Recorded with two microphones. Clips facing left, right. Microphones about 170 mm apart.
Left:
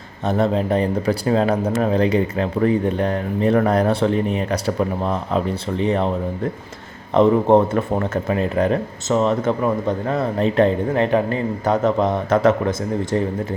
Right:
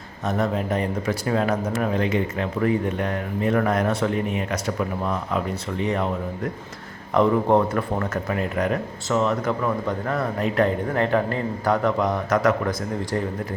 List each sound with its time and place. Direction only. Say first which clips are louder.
0.3 s speech: left 5 dB; 30° left (ahead or behind)